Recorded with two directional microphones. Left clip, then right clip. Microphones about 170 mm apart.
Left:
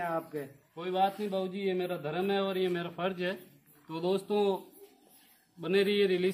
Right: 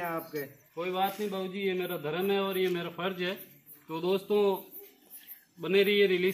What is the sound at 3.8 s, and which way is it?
Speech, 45° left (ahead or behind).